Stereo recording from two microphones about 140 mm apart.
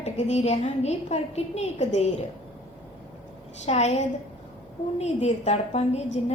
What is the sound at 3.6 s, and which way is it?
A woman's voice, 50° left (ahead or behind).